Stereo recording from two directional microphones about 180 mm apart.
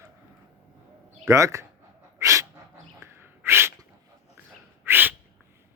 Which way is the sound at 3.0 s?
15° right (ahead or behind).